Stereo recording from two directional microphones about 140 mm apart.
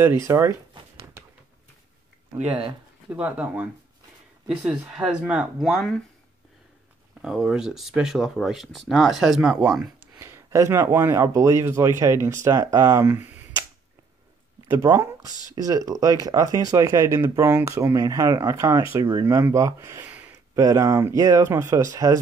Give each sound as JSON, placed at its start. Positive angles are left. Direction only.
{"t": 0.0, "sound": "speech", "side_deg": -20}
{"t": 3.1, "sound": "speech", "side_deg": -10}
{"t": 4.6, "sound": "speech", "side_deg": -5}
{"t": 7.2, "sound": "speech", "side_deg": 0}
{"t": 10.1, "sound": "speech", "side_deg": -20}
{"t": 14.7, "sound": "speech", "side_deg": -25}
{"t": 17.7, "sound": "speech", "side_deg": -25}
{"t": 20.5, "sound": "speech", "side_deg": -20}